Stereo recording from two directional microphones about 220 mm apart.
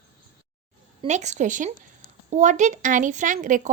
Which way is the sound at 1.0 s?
30° right (ahead or behind).